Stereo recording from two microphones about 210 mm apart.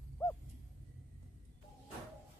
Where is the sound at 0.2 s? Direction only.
15° left (ahead or behind).